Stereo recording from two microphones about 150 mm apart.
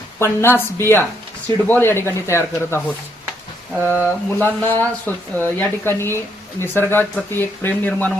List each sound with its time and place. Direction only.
0.2 s speech: 15° left (ahead or behind)
3.8 s speech: 10° left (ahead or behind)